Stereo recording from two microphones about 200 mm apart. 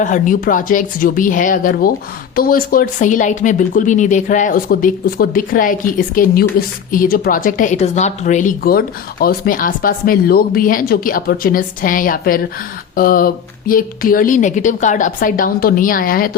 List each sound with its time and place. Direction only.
0.0 s a woman's voice: 40° left (ahead or behind)